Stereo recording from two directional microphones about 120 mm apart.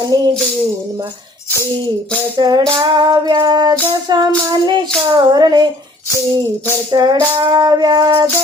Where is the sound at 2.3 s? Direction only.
35° right (ahead or behind).